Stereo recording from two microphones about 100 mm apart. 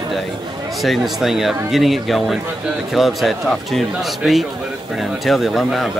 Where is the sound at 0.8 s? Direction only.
Centre (ahead or behind).